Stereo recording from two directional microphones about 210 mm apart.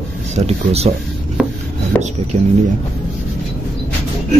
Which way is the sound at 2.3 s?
30° right (ahead or behind).